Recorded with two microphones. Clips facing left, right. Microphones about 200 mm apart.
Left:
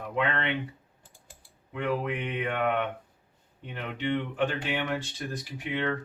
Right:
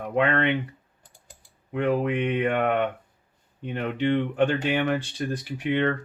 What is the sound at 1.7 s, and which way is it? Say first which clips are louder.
Speech: right 6 dB; 60° right (ahead or behind).